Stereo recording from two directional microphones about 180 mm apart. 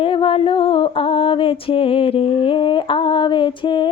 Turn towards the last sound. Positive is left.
turn(degrees=25)  # may be behind; listen again after turning